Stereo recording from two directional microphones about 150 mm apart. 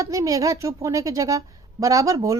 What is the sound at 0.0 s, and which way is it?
A woman's voice, 20° right (ahead or behind).